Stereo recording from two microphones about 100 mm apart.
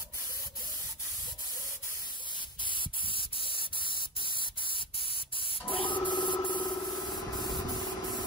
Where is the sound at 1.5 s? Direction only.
30° right (ahead or behind).